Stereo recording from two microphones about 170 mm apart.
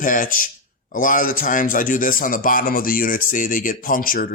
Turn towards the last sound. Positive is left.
turn(degrees=55)  # may be behind; listen again after turning